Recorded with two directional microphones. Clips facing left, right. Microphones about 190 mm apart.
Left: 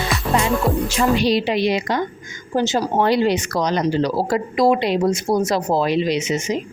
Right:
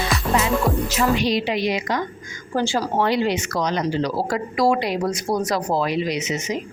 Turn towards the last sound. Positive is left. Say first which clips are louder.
# left 4 dB
turn(degrees=25)  # may be behind; listen again after turning